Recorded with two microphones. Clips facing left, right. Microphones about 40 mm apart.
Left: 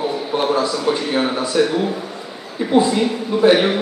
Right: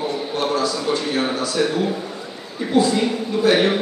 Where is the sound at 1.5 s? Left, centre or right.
Centre.